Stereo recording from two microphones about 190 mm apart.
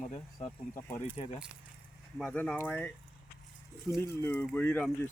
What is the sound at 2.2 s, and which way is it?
Speech, 5° left (ahead or behind).